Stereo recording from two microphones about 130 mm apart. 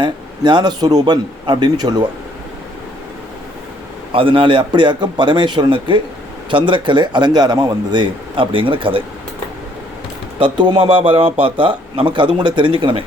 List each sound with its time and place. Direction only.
0.0 s a man's voice: 35° right (ahead or behind)
4.1 s a man's voice: 45° right (ahead or behind)
10.4 s a man's voice: 40° right (ahead or behind)